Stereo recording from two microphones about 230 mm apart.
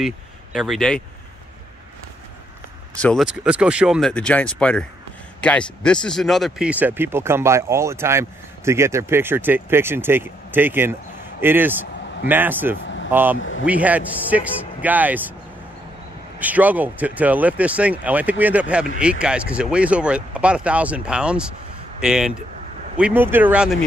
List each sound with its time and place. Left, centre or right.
0.0 s speech: centre
3.0 s speech: centre
12.8 s vehicle: left
13.1 s speech: centre
16.3 s speech: centre